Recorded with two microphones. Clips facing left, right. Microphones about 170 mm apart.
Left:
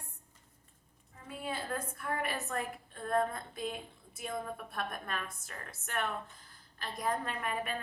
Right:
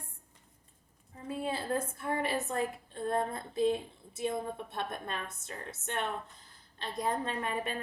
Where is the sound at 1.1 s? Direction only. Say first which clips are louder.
Right 5 dB; 30° right (ahead or behind).